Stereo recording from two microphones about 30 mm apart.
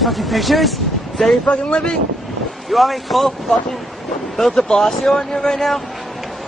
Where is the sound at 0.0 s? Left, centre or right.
Centre.